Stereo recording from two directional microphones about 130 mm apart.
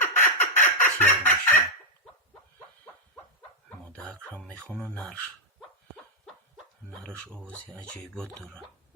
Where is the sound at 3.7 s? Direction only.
10° left (ahead or behind).